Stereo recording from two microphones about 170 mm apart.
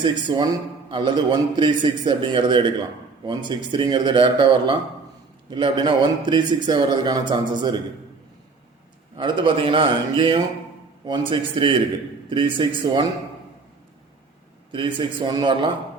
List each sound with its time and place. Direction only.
0.0 s a man's voice: 25° right (ahead or behind)
9.1 s a man's voice: 25° right (ahead or behind)
14.7 s a man's voice: 30° right (ahead or behind)